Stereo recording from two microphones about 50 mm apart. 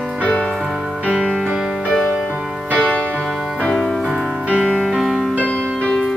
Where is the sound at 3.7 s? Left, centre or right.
Centre.